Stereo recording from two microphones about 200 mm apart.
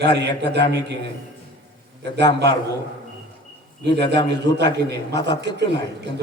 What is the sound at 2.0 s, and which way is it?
Speech, 60° right (ahead or behind).